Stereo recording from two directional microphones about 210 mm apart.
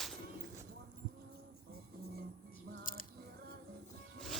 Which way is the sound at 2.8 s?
40° left (ahead or behind).